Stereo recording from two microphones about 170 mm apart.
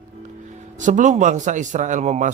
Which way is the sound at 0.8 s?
45° right (ahead or behind).